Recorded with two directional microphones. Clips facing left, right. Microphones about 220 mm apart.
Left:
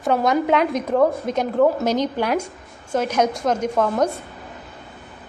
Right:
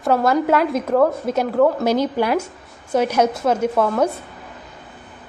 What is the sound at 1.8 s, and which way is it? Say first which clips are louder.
A woman's voice: right 2 dB; 10° right (ahead or behind).